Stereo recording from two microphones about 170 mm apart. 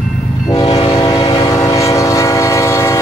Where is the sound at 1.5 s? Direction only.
20° left (ahead or behind).